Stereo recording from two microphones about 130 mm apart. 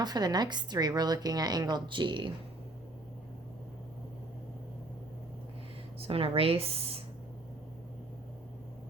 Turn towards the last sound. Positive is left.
turn(degrees=-50)  # may be behind; listen again after turning